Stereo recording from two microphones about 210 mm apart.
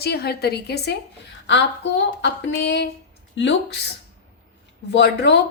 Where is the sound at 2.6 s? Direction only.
55° left (ahead or behind).